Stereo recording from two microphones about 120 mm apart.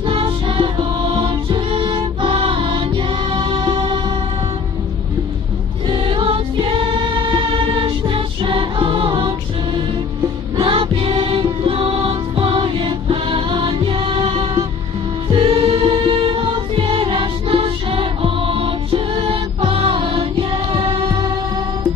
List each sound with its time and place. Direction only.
0.0 s music: 45° right (ahead or behind)
5.9 s music: 45° right (ahead or behind)
10.6 s music: 50° right (ahead or behind)